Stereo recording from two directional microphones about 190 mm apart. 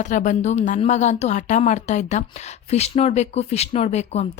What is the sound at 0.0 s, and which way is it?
Speech, 40° left (ahead or behind).